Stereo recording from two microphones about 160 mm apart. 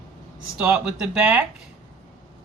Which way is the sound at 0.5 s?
5° right (ahead or behind).